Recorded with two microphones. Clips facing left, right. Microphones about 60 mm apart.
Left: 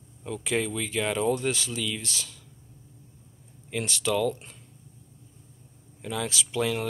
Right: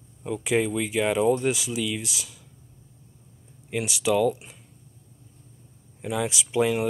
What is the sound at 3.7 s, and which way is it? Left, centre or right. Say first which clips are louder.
Speech: right 3 dB; centre.